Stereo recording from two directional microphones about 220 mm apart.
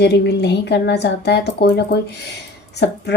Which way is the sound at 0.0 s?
50° left (ahead or behind).